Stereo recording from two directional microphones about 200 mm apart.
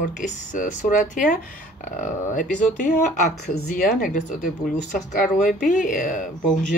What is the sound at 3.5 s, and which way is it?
Speech, 45° left (ahead or behind).